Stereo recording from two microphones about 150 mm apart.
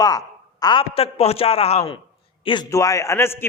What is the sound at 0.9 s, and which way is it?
A man's voice, 40° left (ahead or behind).